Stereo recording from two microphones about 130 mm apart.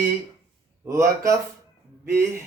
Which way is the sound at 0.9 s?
25° right (ahead or behind).